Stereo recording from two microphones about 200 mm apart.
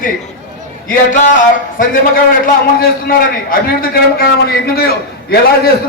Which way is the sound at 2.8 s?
45° left (ahead or behind).